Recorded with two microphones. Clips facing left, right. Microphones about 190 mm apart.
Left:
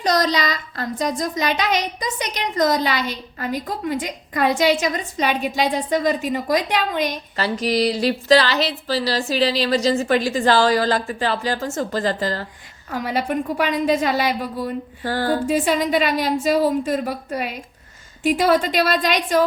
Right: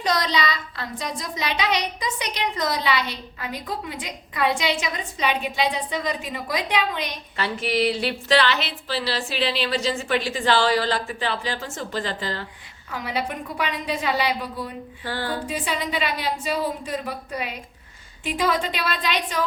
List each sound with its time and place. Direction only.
0.0 s a woman's voice: 40° left (ahead or behind)